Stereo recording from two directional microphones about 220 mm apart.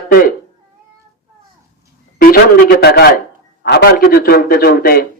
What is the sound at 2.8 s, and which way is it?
A man's voice, 45° left (ahead or behind).